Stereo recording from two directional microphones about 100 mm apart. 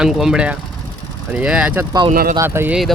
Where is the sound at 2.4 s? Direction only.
25° right (ahead or behind).